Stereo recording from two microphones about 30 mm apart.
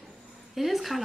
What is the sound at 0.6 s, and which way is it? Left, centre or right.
Speech, centre.